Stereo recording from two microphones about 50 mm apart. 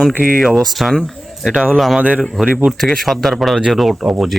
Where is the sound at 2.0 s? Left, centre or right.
Right.